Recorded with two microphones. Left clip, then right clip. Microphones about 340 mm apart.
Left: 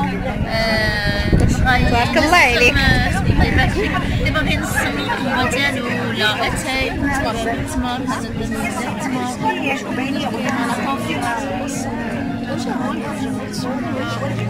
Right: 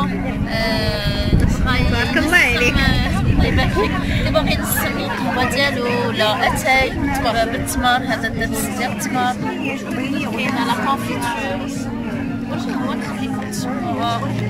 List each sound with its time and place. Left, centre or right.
0.6 s sheep: centre
2.0 s speech: centre
6.1 s a woman's voice: centre